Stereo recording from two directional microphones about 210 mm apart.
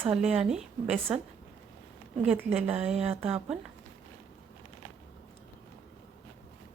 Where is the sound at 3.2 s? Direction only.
30° right (ahead or behind).